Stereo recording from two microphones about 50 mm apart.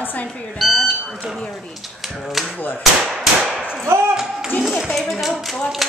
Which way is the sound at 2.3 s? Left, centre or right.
Centre.